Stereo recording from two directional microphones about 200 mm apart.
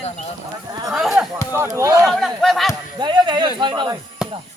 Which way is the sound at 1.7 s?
15° right (ahead or behind).